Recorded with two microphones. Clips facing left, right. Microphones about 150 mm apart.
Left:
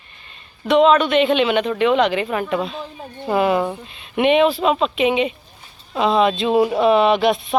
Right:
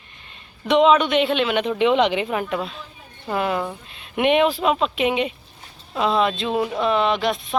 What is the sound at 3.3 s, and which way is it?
Speech, 10° left (ahead or behind).